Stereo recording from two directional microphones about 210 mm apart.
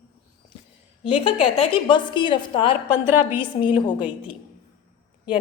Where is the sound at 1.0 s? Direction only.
25° left (ahead or behind).